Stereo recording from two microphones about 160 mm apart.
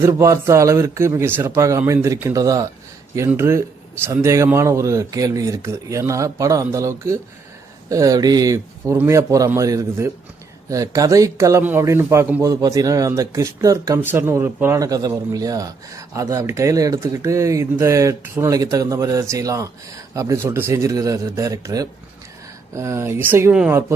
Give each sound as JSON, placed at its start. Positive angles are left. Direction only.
{"t": 0.0, "sound": "speech", "side_deg": -20}